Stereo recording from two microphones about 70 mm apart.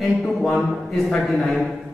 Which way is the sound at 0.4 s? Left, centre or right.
Centre.